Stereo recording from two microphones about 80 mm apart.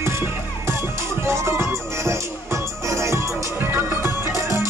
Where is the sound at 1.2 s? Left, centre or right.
Right.